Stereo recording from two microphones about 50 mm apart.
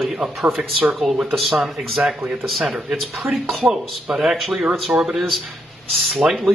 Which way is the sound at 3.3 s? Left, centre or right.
Centre.